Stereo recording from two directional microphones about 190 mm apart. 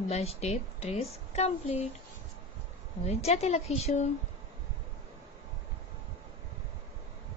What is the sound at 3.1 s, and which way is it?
A woman's voice, 35° left (ahead or behind).